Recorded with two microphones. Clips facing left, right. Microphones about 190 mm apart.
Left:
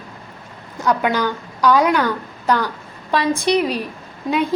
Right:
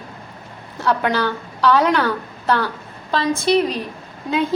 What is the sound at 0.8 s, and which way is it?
A woman's voice, 15° left (ahead or behind).